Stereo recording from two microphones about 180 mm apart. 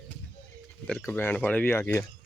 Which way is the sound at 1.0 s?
10° left (ahead or behind).